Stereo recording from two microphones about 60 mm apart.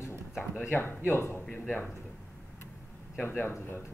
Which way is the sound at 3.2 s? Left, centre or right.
Left.